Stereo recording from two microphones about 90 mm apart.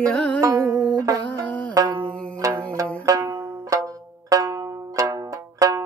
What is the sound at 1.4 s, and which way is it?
Music, 15° left (ahead or behind).